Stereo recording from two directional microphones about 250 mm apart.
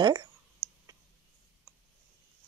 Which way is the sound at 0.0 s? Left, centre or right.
Centre.